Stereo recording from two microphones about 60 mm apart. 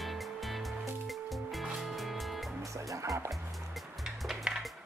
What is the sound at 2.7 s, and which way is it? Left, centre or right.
Music, right.